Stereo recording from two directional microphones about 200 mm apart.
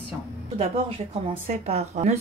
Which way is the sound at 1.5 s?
35° right (ahead or behind).